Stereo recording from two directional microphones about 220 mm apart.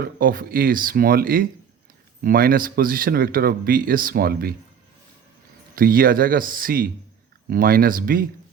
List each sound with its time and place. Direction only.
0.0 s speech: 40° right (ahead or behind)
5.7 s speech: 40° right (ahead or behind)